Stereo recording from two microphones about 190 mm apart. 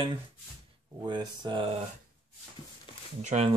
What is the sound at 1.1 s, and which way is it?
Speech, 25° right (ahead or behind).